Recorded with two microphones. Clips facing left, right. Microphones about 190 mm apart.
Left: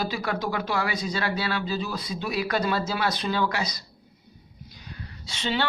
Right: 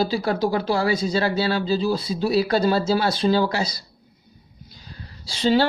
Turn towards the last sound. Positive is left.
turn(degrees=-35)  # may be behind; listen again after turning